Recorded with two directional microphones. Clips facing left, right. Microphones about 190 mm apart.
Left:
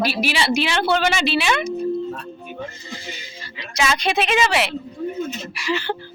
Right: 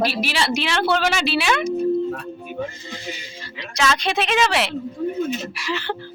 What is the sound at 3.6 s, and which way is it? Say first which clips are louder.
Speech: even; 5° left (ahead or behind).